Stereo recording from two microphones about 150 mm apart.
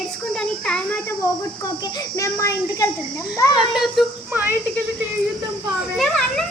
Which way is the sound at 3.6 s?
Centre (ahead or behind).